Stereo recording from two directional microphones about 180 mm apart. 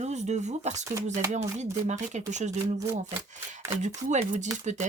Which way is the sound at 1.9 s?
40° right (ahead or behind).